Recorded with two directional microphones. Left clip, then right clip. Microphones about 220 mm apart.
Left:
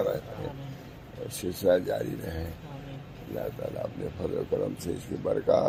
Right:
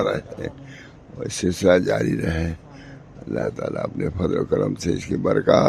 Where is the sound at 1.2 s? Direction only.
45° right (ahead or behind).